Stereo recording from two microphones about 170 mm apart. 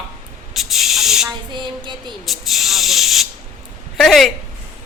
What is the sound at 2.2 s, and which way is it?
A man's voice, centre (ahead or behind).